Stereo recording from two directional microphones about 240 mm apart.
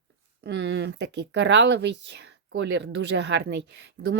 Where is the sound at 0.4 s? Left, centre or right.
Right.